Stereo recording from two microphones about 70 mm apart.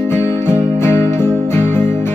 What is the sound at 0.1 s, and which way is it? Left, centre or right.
Music, left.